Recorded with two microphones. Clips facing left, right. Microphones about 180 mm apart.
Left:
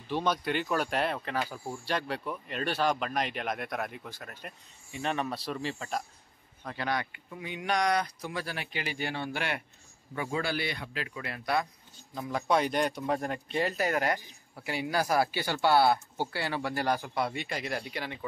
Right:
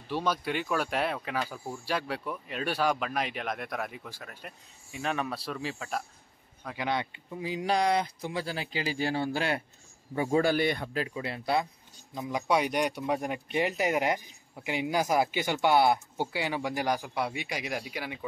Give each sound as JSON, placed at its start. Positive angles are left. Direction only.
{"t": 0.1, "sound": "speech", "side_deg": -5}
{"t": 1.9, "sound": "speech", "side_deg": -5}
{"t": 6.9, "sound": "speech", "side_deg": -25}
{"t": 10.4, "sound": "a man's voice", "side_deg": -45}
{"t": 11.1, "sound": "speech", "side_deg": -25}
{"t": 12.2, "sound": "a man's voice", "side_deg": -15}